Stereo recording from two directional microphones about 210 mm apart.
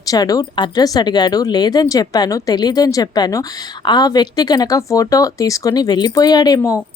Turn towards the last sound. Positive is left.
turn(degrees=15)  # may be behind; listen again after turning